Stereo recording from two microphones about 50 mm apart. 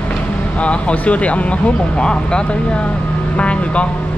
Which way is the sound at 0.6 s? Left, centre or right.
Left.